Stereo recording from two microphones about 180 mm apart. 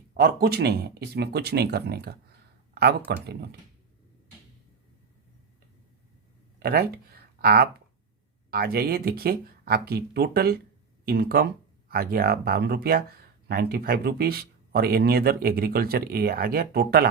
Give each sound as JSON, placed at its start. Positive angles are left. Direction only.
{"t": 0.1, "sound": "speech", "side_deg": -55}
{"t": 6.6, "sound": "speech", "side_deg": -60}